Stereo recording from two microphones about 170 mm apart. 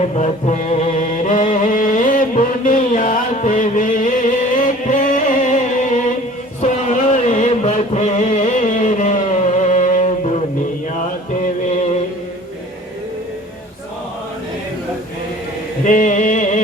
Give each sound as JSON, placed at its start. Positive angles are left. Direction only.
{"t": 0.2, "sound": "music", "side_deg": 40}
{"t": 15.8, "sound": "music", "side_deg": 50}